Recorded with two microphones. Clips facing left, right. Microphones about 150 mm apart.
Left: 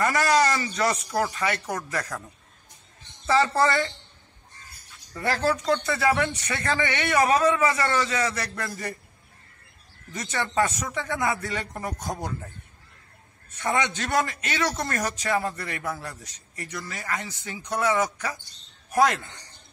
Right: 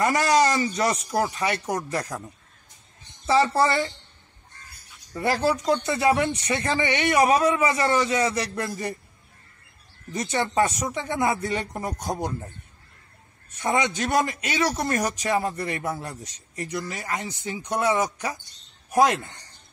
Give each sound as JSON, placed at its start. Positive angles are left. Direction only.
{"t": 0.0, "sound": "a man's voice", "side_deg": -20}
{"t": 3.3, "sound": "speech", "side_deg": -15}
{"t": 5.1, "sound": "a man's voice", "side_deg": -15}
{"t": 10.1, "sound": "a man's voice", "side_deg": -15}
{"t": 13.6, "sound": "a man's voice", "side_deg": -20}